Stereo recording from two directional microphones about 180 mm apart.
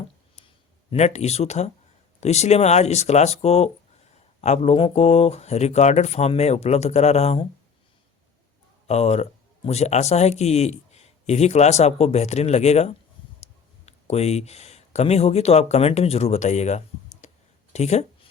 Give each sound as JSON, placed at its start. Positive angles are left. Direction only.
{"t": 0.9, "sound": "a man's voice", "side_deg": 35}
{"t": 8.9, "sound": "a man's voice", "side_deg": 35}